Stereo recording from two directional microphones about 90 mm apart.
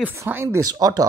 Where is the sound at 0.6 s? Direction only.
45° right (ahead or behind).